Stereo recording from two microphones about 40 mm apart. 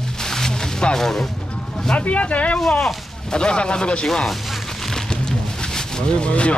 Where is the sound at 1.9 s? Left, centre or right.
Left.